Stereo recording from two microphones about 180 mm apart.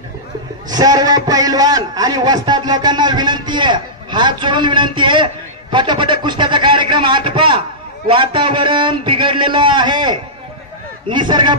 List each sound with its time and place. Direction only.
0.7 s a man's voice: 20° right (ahead or behind)